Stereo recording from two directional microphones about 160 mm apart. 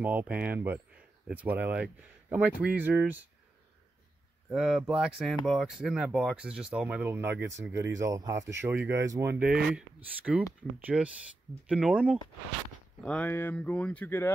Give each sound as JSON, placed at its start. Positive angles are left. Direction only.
{"t": 0.0, "sound": "speech", "side_deg": -10}
{"t": 4.5, "sound": "speech", "side_deg": -5}
{"t": 10.9, "sound": "speech", "side_deg": 0}
{"t": 13.0, "sound": "speech", "side_deg": 10}